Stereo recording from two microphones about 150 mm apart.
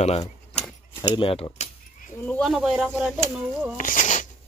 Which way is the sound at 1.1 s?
40° left (ahead or behind).